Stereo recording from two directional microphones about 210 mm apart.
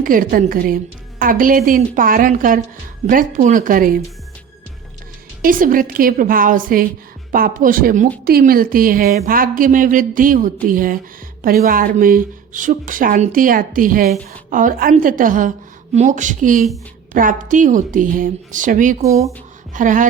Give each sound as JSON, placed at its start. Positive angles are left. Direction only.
{"t": 0.0, "sound": "speech", "side_deg": -40}
{"t": 5.4, "sound": "speech", "side_deg": -40}